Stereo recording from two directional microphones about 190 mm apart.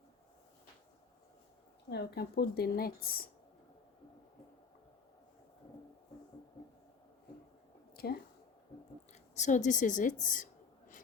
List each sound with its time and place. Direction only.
1.9 s a woman's voice: 60° left (ahead or behind)
7.9 s speech: 55° left (ahead or behind)
9.1 s a sound: 40° left (ahead or behind)